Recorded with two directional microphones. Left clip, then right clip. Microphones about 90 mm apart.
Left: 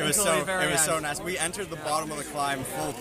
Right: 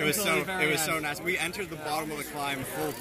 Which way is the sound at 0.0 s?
50° left (ahead or behind).